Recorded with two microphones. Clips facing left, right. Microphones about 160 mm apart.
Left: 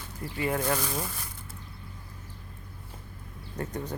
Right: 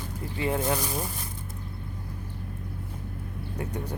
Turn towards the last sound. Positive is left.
turn(degrees=-10)  # may be behind; listen again after turning